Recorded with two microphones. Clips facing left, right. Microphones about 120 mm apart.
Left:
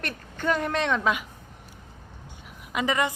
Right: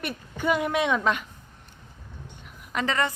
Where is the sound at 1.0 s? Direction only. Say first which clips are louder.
Even; 5° left (ahead or behind).